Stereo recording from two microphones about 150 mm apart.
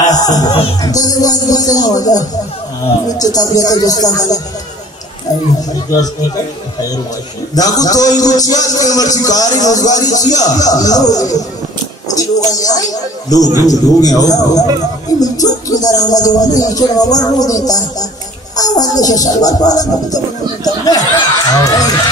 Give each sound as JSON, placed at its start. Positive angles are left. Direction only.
{"t": 0.0, "sound": "music", "side_deg": 25}
{"t": 0.8, "sound": "a man's voice", "side_deg": 25}
{"t": 7.5, "sound": "a man's voice", "side_deg": 25}
{"t": 12.2, "sound": "a sound", "side_deg": 25}
{"t": 13.7, "sound": "a man's voice", "side_deg": 25}